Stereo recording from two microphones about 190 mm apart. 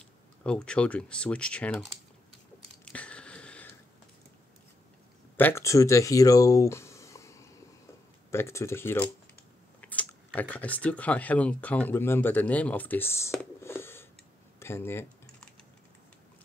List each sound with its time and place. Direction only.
0.4 s speech: 5° left (ahead or behind)
2.8 s a sound: 5° left (ahead or behind)
5.4 s speech: 15° left (ahead or behind)
14.6 s typing: 10° left (ahead or behind)